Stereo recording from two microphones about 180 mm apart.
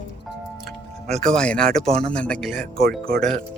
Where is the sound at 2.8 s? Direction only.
60° right (ahead or behind).